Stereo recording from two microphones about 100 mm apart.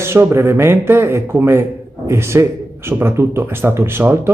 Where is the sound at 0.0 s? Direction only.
25° right (ahead or behind).